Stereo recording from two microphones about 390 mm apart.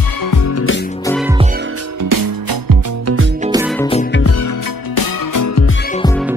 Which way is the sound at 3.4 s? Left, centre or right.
Centre.